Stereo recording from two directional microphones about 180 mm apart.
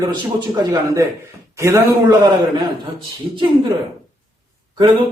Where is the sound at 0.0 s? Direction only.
20° right (ahead or behind).